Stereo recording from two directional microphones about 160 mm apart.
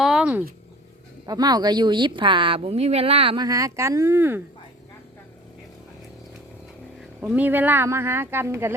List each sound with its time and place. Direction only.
0.0 s a sound: 5° right (ahead or behind)
1.3 s speech: 25° right (ahead or behind)
7.2 s speech: 10° right (ahead or behind)